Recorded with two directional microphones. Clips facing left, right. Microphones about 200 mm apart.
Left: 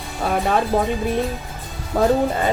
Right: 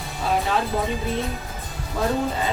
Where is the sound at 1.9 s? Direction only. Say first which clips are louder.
Left 7 dB; 60° left (ahead or behind).